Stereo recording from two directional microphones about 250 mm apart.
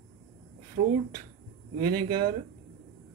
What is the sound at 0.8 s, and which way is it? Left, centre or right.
Speech, right.